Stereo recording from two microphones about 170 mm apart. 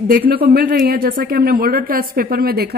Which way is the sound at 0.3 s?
60° right (ahead or behind).